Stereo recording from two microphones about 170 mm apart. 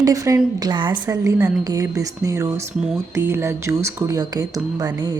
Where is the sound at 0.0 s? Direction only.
20° right (ahead or behind).